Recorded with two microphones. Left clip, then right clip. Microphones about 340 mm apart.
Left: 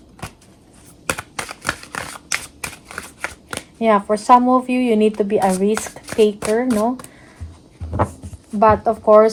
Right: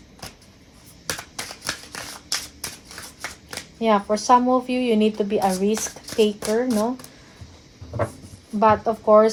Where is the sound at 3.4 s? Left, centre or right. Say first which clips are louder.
Left 4 dB; left.